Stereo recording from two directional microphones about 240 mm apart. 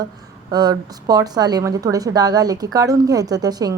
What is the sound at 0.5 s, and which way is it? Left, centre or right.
Speech, centre.